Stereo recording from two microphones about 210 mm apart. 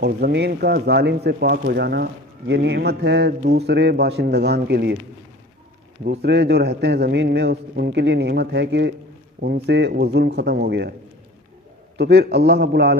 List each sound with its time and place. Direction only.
0.0 s speech: 50° right (ahead or behind)
6.0 s speech: 50° right (ahead or behind)
12.0 s speech: 50° right (ahead or behind)